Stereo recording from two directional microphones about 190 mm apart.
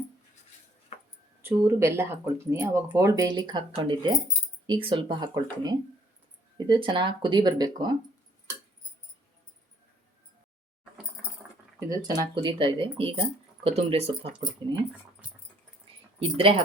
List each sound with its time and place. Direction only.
1.4 s speech: 15° right (ahead or behind)
11.9 s speech: 20° right (ahead or behind)
16.2 s speech: 30° right (ahead or behind)